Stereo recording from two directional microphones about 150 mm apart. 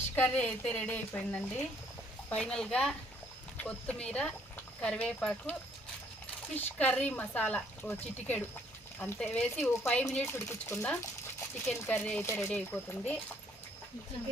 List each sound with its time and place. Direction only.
0.2 s a woman's voice: 10° left (ahead or behind)
6.6 s speech: 10° left (ahead or behind)